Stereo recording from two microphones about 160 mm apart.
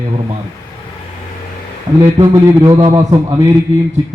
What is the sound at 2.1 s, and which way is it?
A man's voice, 20° right (ahead or behind).